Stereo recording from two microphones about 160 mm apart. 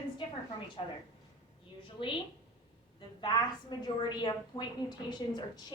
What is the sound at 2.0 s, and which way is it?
A woman's voice, 30° left (ahead or behind).